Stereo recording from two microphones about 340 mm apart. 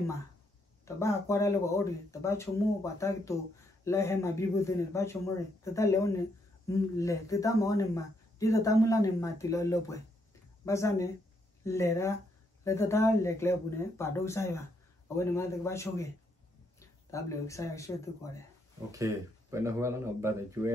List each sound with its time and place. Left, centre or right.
0.8 s speech: centre
18.9 s speech: centre